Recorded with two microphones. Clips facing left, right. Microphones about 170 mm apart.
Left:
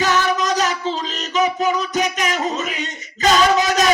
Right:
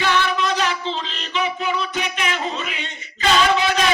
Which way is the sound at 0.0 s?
40° left (ahead or behind).